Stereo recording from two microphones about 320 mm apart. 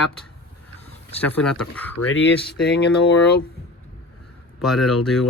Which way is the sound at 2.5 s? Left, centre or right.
Left.